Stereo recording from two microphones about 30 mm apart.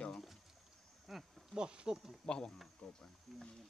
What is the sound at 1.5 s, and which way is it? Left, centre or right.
Speech, right.